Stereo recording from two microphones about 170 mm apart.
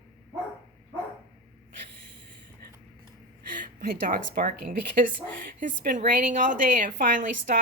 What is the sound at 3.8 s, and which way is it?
A woman's voice, 60° right (ahead or behind).